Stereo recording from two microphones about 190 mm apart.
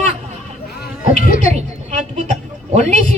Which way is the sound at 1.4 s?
35° right (ahead or behind).